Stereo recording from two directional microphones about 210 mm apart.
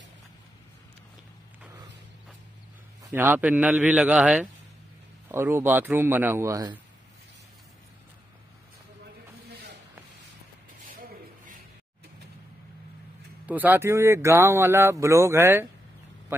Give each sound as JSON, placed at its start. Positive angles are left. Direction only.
{"t": 3.0, "sound": "speech", "side_deg": -10}
{"t": 10.9, "sound": "a sound", "side_deg": -40}
{"t": 13.5, "sound": "speech", "side_deg": -10}